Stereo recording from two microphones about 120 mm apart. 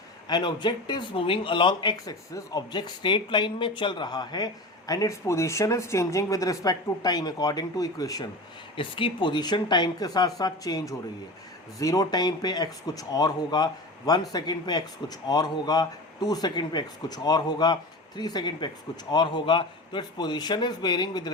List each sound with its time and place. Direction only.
0.3 s speech: 40° left (ahead or behind)
8.7 s speech: 45° left (ahead or behind)